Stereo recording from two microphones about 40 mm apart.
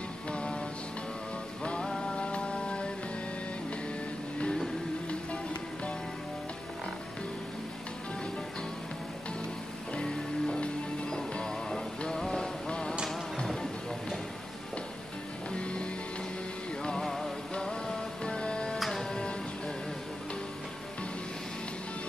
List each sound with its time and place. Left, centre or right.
0.3 s music: left
5.3 s music: left
9.9 s music: left
15.5 s music: left
17.0 s music: centre
18.8 s music: centre
19.0 s music: centre